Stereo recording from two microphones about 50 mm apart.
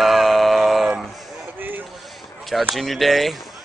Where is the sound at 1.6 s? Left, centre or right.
Right.